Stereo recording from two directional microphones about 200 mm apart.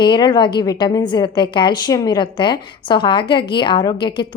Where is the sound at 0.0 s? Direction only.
25° left (ahead or behind).